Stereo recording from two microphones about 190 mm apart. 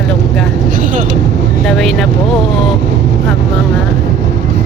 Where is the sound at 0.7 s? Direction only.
45° right (ahead or behind).